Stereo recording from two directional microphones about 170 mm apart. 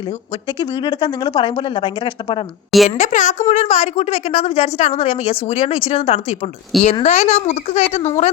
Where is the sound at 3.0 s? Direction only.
45° left (ahead or behind).